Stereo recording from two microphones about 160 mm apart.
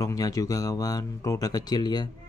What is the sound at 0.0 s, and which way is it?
Speech, 20° left (ahead or behind).